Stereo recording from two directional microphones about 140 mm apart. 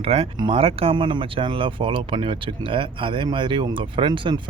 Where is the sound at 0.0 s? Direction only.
45° right (ahead or behind).